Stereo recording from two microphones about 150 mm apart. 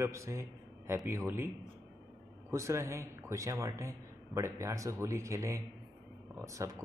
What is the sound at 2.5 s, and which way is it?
Speech, 20° right (ahead or behind).